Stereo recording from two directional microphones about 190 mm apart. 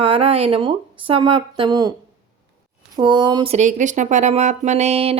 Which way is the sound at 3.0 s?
25° right (ahead or behind).